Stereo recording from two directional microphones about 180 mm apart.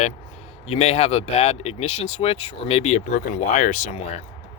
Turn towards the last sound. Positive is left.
turn(degrees=40)  # may be behind; listen again after turning